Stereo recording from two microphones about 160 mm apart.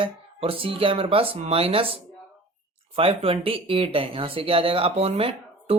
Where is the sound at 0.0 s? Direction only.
35° right (ahead or behind).